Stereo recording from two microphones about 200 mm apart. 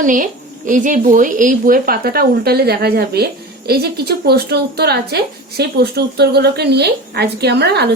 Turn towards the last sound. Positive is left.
turn(degrees=-55)  # may be behind; listen again after turning